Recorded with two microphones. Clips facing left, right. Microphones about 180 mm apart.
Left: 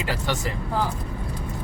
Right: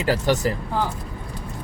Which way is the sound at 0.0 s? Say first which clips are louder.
Right 7 dB; 40° right (ahead or behind).